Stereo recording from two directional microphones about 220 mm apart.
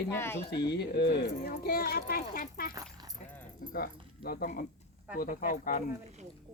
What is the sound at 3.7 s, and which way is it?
Speech, 40° left (ahead or behind).